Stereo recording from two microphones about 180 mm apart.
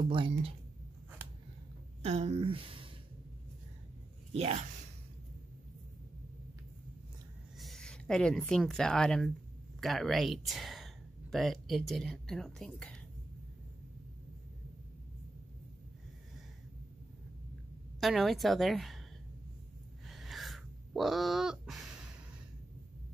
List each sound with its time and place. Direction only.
2.0 s speech: 35° right (ahead or behind)
4.3 s speech: 35° right (ahead or behind)
7.5 s speech: centre (ahead or behind)
18.0 s speech: centre (ahead or behind)
20.1 s a sound: centre (ahead or behind)